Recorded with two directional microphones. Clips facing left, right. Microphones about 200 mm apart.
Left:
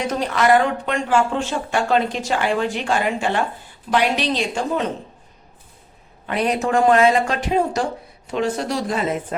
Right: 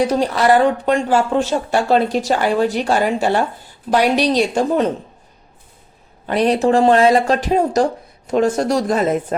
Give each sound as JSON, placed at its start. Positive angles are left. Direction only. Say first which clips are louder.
{"t": 0.0, "sound": "speech", "louder": "right 4 dB", "side_deg": -35}
{"t": 6.2, "sound": "speech", "louder": "right 6 dB", "side_deg": -35}